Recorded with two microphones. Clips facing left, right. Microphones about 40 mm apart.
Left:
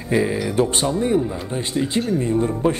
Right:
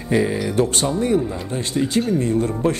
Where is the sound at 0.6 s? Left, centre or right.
Left.